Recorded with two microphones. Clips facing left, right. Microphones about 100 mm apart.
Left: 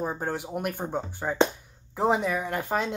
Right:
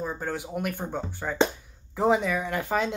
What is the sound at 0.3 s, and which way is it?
Speech, 5° left (ahead or behind).